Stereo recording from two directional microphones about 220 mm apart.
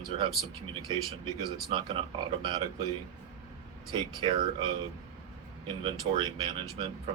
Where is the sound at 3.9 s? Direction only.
20° right (ahead or behind).